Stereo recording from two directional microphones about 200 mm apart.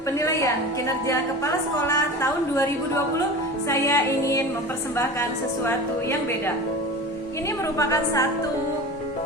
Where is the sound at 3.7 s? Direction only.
15° left (ahead or behind).